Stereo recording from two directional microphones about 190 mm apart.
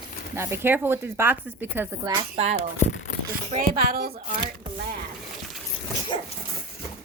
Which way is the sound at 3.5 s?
50° right (ahead or behind).